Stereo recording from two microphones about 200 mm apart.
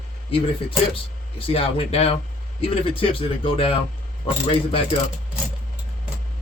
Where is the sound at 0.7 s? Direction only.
25° left (ahead or behind).